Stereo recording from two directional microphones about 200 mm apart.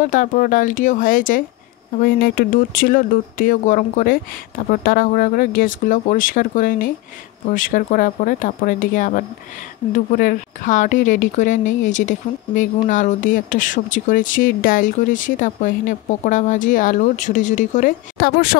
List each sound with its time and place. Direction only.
0.0 s speech: 40° left (ahead or behind)